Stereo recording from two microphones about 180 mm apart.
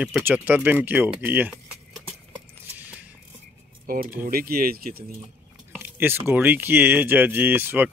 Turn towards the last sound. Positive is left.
turn(degrees=-10)  # may be behind; listen again after turning